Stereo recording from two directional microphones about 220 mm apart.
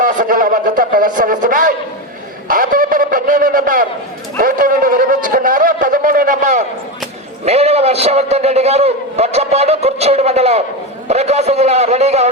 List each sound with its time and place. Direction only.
0.0 s a man's voice: 35° right (ahead or behind)